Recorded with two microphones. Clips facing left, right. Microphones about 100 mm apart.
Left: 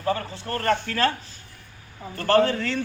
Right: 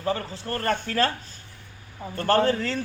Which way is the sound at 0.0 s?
30° right (ahead or behind).